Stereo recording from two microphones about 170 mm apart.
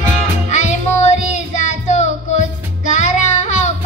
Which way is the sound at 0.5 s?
45° left (ahead or behind).